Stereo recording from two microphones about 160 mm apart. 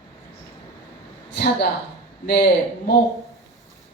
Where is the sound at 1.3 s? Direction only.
90° left.